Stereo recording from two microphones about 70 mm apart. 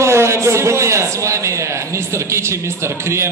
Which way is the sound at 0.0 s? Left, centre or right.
Right.